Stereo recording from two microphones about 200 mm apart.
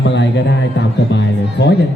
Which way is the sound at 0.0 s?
65° left (ahead or behind).